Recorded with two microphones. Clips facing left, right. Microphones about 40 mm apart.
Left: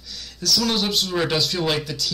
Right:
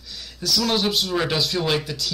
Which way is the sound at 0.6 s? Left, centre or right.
Centre.